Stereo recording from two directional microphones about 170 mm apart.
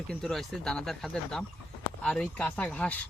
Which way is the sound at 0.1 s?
Centre (ahead or behind).